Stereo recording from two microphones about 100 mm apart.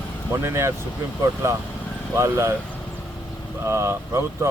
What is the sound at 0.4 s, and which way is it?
Speech, 25° right (ahead or behind).